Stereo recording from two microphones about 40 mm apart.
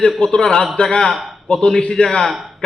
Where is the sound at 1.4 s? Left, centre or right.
Centre.